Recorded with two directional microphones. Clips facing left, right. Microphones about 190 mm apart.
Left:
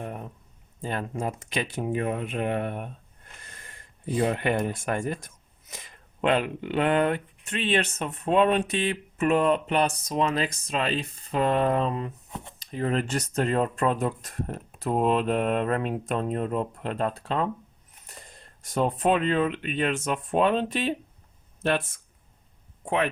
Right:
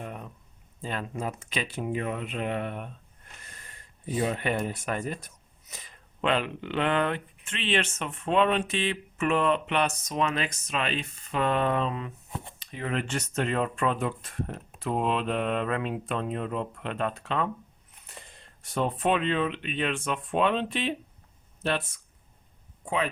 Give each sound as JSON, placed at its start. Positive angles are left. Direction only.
{"t": 0.0, "sound": "a sound", "side_deg": 50}
{"t": 0.8, "sound": "speech", "side_deg": 45}
{"t": 4.2, "sound": "speech", "side_deg": 60}
{"t": 6.2, "sound": "speech", "side_deg": 45}